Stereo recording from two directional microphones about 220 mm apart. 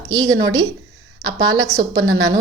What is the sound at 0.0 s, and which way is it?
A woman's voice, 15° right (ahead or behind).